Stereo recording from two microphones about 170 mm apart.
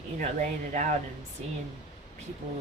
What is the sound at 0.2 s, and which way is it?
Speech, 50° right (ahead or behind).